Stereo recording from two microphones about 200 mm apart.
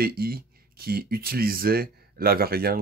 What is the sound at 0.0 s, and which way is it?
Speech, 50° right (ahead or behind).